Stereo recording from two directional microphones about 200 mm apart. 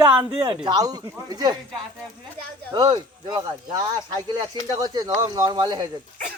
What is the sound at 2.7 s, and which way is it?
Speech, 20° right (ahead or behind).